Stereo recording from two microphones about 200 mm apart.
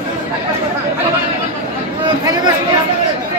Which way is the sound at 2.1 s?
20° right (ahead or behind).